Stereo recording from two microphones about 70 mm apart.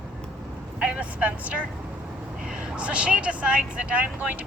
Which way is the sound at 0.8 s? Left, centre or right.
Centre.